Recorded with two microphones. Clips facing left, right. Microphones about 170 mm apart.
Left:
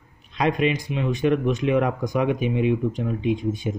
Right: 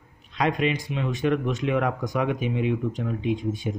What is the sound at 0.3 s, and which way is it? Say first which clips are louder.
Speech: left 2 dB; 20° left (ahead or behind).